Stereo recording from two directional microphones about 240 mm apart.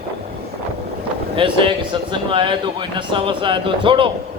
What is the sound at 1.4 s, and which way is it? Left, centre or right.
Speech, right.